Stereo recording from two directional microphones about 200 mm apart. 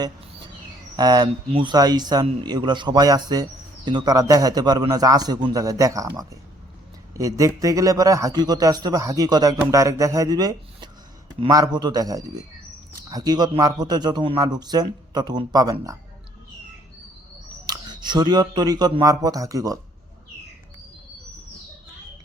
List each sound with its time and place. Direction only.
0.9 s a man's voice: 20° right (ahead or behind)
17.7 s speech: 20° right (ahead or behind)